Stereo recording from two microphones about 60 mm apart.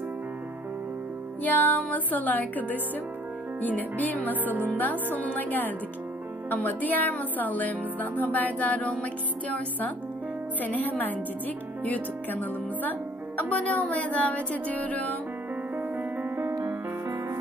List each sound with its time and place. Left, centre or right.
1.4 s speech: left
4.4 s speech: right
4.7 s a woman's voice: left
15.7 s music: right
16.6 s music: right